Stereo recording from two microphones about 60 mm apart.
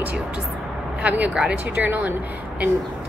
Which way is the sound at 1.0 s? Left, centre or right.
Right.